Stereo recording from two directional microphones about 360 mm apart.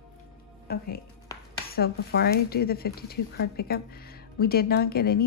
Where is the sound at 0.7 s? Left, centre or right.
Left.